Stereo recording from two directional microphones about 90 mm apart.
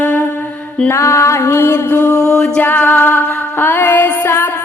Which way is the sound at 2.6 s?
20° left (ahead or behind).